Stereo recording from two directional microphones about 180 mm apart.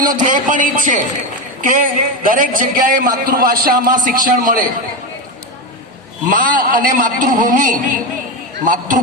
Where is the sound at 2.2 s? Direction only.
50° right (ahead or behind).